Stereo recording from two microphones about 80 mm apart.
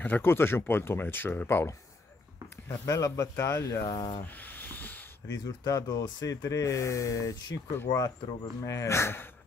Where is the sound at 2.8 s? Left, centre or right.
Left.